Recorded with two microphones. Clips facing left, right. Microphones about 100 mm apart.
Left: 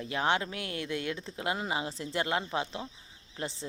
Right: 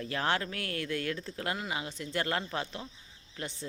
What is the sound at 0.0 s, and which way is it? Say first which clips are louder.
Speech: left 2 dB; 15° left (ahead or behind).